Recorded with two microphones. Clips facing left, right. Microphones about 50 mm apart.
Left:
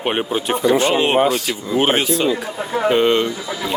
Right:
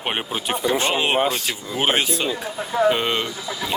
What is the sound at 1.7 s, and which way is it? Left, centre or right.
Speech, centre.